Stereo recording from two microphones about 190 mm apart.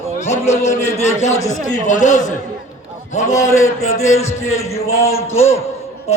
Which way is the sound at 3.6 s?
90° left.